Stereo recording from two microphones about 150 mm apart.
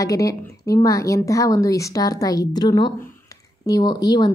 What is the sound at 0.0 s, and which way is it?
A woman's voice, 20° left (ahead or behind).